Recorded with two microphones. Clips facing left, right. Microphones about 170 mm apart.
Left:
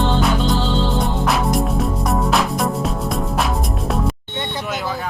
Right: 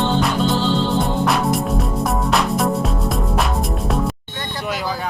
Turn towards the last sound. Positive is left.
turn(degrees=0)  # may be behind; listen again after turning